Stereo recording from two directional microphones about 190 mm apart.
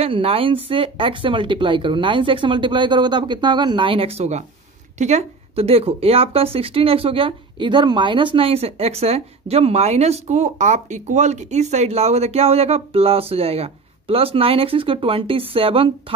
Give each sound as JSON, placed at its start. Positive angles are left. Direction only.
{"t": 0.0, "sound": "speech", "side_deg": -30}